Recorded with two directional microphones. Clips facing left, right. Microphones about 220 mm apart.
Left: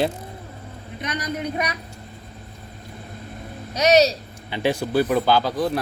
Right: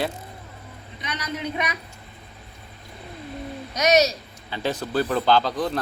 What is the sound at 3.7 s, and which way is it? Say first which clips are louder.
Speech: left 3 dB; 35° left (ahead or behind).